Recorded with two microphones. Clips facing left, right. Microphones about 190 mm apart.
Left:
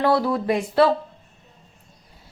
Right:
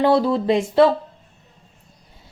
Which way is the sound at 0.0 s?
25° right (ahead or behind).